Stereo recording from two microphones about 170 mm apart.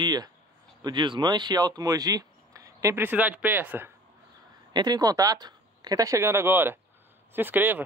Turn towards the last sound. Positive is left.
turn(degrees=-10)  # may be behind; listen again after turning